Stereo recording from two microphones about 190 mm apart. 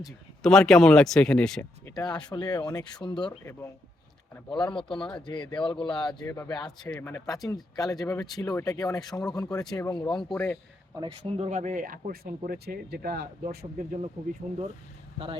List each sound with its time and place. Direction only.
0.4 s speech: 5° left (ahead or behind)
1.8 s speech: 20° left (ahead or behind)
4.4 s speech: 25° left (ahead or behind)
10.2 s speech: 10° left (ahead or behind)
10.9 s speech: 25° right (ahead or behind); by 13.8 s 50° right (ahead or behind)
14.4 s speech: 30° right (ahead or behind)